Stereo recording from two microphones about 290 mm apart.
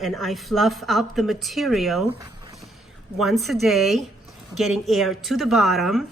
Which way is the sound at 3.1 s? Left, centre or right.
Centre.